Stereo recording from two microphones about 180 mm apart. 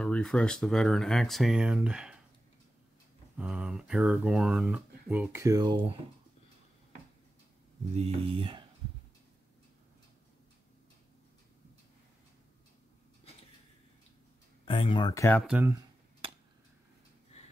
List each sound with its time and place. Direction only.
0.0 s speech: 5° left (ahead or behind)
3.3 s speech: 5° right (ahead or behind); by 5.9 s 20° right (ahead or behind)
7.9 s speech: 35° right (ahead or behind)
14.6 s speech: 30° left (ahead or behind)
15.4 s speech: 10° right (ahead or behind)
17.3 s a sound: 35° left (ahead or behind)